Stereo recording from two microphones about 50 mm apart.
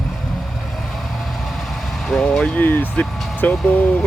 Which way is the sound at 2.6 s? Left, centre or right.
Left.